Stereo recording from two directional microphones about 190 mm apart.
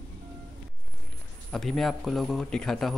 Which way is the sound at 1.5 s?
Centre (ahead or behind).